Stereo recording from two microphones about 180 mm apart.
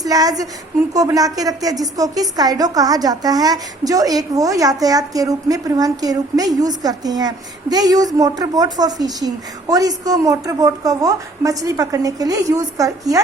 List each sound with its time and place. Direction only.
0.0 s a woman's voice: 20° right (ahead or behind)